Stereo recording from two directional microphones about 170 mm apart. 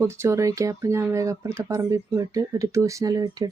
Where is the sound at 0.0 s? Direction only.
15° right (ahead or behind).